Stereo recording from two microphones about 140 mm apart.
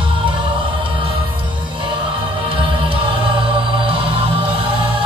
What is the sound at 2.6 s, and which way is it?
Music, 35° right (ahead or behind).